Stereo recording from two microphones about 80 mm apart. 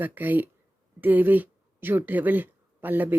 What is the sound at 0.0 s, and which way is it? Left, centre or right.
Speech, right.